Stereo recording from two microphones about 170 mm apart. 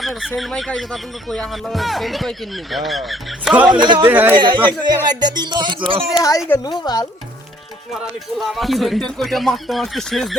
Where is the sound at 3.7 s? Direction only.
30° right (ahead or behind).